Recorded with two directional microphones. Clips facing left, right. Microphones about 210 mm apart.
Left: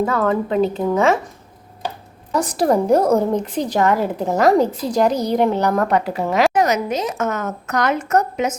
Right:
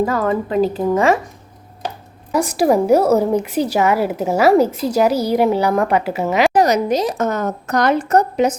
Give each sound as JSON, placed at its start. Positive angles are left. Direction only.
{"t": 0.0, "sound": "a woman's voice", "side_deg": -5}
{"t": 2.3, "sound": "a woman's voice", "side_deg": -10}
{"t": 6.5, "sound": "a woman's voice", "side_deg": -35}